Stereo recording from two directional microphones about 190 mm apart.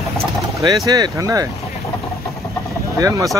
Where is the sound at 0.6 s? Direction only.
20° right (ahead or behind).